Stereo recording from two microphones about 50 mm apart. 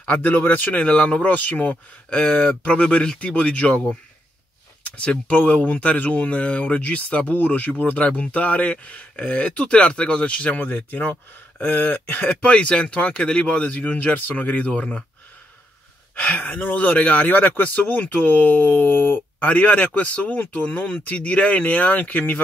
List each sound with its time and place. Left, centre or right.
0.0 s speech: left
0.3 s speech: left
1.2 s speech: left
2.8 s speech: centre
4.8 s speech: left
12.4 s speech: left
14.7 s speech: left
16.2 s speech: left